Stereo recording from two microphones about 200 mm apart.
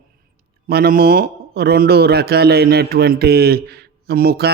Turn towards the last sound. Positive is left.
turn(degrees=-50)  # may be behind; listen again after turning